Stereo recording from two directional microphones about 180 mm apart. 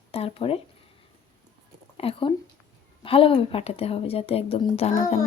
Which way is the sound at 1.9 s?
30° left (ahead or behind).